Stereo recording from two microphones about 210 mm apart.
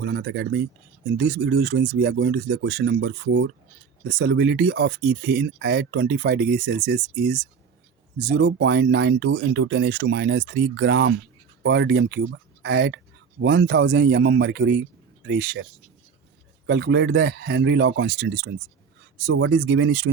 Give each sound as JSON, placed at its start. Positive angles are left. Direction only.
{"t": 0.0, "sound": "speech", "side_deg": -55}
{"t": 16.6, "sound": "speech", "side_deg": -55}